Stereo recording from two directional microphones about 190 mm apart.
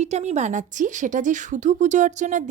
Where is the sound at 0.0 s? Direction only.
35° right (ahead or behind).